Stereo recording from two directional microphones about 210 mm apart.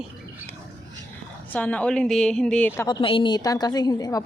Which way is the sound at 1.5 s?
5° left (ahead or behind).